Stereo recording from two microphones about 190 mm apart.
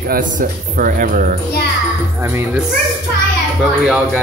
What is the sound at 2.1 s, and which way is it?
Speech, 10° right (ahead or behind).